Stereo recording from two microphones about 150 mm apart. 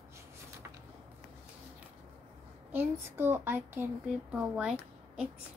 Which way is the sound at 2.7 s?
15° right (ahead or behind).